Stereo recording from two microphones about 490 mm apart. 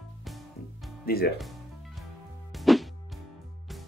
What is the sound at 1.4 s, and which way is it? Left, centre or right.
Music, centre.